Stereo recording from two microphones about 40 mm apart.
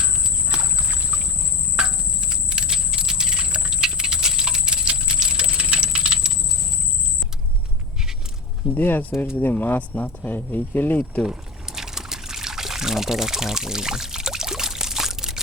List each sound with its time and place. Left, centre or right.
0.5 s rowboat: right
1.8 s cricket: right
2.3 s a sound: right
8.7 s speech: left
11.3 s trickle: centre